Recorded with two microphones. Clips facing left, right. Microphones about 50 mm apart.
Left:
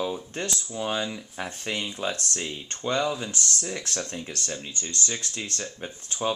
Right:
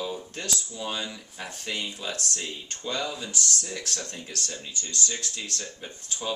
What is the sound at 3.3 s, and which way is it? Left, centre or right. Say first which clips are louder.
Speech: left 1 dB; left.